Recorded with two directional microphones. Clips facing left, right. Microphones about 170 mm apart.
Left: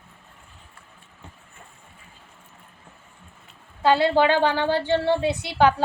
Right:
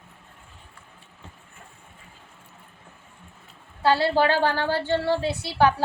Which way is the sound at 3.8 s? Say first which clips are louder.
Left 2 dB; 20° left (ahead or behind).